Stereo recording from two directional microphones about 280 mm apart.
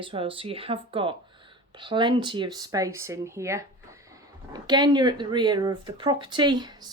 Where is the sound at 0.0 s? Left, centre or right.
Centre.